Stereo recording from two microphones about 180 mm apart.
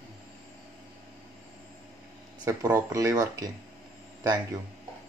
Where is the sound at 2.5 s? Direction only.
15° right (ahead or behind).